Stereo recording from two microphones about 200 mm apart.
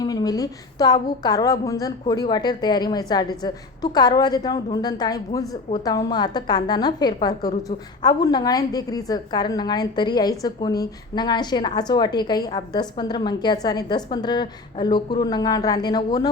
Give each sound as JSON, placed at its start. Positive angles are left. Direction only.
{"t": 0.0, "sound": "a woman's voice", "side_deg": 20}